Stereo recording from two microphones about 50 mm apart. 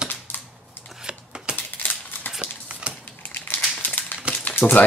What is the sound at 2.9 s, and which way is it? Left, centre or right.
Typing, right.